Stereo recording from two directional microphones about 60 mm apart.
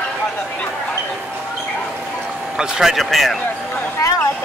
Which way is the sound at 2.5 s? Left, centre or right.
Centre.